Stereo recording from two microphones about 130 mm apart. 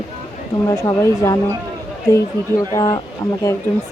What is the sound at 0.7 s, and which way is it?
Speech, 25° left (ahead or behind).